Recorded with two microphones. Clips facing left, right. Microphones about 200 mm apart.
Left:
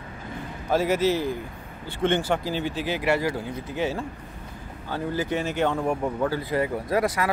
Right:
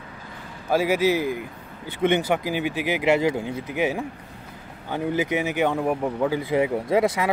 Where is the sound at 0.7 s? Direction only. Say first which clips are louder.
Right 2 dB; 10° right (ahead or behind).